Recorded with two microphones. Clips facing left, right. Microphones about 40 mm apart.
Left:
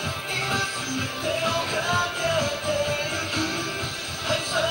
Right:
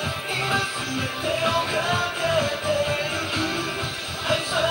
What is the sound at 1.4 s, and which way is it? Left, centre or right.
Music, right.